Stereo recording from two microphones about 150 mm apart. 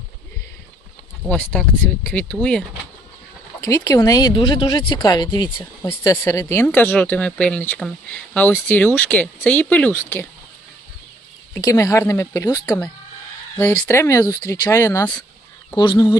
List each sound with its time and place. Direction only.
1.3 s speech: 10° left (ahead or behind)
3.6 s speech: 20° left (ahead or behind)
6.0 s speech: 20° left (ahead or behind)
11.5 s speech: 20° left (ahead or behind)
15.7 s speech: 30° left (ahead or behind)